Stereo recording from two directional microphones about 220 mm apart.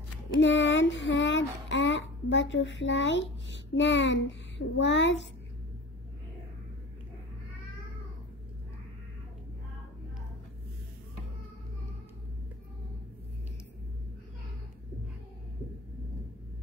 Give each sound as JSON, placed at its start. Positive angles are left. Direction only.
{"t": 0.4, "sound": "speech", "side_deg": 55}